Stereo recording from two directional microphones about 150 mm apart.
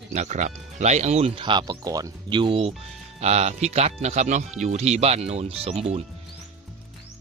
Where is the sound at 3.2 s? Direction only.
45° right (ahead or behind).